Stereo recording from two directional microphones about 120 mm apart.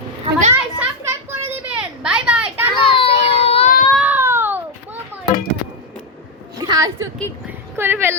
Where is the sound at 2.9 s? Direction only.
50° left (ahead or behind).